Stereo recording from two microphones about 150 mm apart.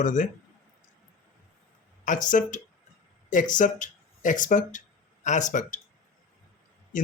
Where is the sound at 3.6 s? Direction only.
60° left (ahead or behind).